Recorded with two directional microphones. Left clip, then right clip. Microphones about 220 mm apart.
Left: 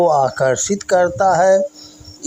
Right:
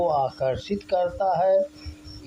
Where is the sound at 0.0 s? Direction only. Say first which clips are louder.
Left 9 dB; 35° left (ahead or behind).